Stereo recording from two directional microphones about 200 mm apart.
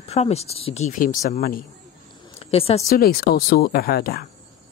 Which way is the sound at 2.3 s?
30° left (ahead or behind).